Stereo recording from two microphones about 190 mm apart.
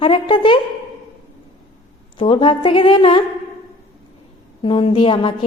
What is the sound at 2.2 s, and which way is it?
A woman's voice, 25° left (ahead or behind).